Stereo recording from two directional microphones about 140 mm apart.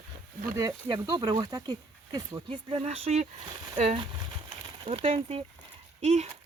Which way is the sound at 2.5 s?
40° right (ahead or behind).